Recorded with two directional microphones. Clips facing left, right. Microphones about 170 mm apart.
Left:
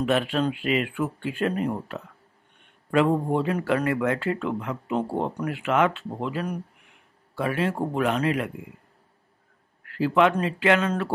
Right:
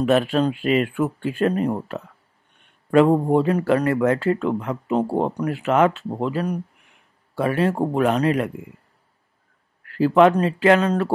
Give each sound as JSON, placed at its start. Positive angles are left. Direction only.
{"t": 0.0, "sound": "speech", "side_deg": -40}
{"t": 9.8, "sound": "speech", "side_deg": -40}